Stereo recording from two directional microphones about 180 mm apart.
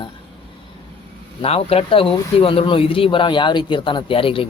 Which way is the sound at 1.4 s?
35° left (ahead or behind).